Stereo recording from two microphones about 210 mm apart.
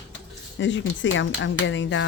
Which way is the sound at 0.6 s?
60° left (ahead or behind).